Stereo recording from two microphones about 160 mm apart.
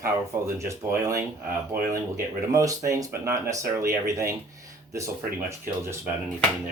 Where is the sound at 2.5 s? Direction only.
20° right (ahead or behind).